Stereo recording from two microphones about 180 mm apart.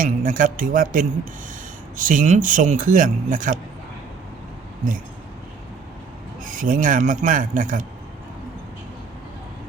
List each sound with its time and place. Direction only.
0.0 s speech: 50° right (ahead or behind)
6.4 s speech: 50° right (ahead or behind)